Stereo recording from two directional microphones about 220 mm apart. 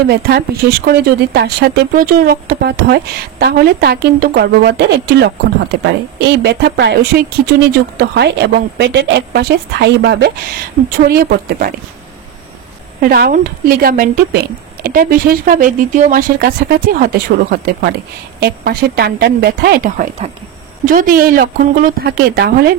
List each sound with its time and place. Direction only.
0.1 s speech: 45° right (ahead or behind)
13.0 s speech: 40° right (ahead or behind)